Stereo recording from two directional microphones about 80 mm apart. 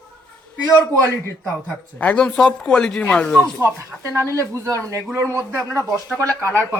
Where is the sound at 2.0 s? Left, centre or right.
Centre.